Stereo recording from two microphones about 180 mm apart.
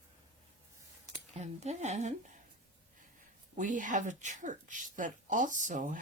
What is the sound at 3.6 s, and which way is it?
Speech, 45° right (ahead or behind).